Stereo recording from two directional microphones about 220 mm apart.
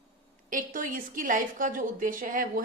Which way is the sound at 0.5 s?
35° right (ahead or behind).